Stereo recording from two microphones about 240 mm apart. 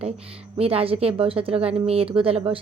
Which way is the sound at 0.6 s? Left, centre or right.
Right.